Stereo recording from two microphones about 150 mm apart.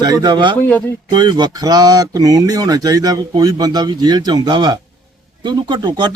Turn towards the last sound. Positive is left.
turn(degrees=-30)  # may be behind; listen again after turning